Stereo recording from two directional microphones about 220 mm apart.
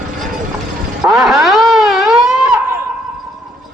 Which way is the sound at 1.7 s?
Centre (ahead or behind).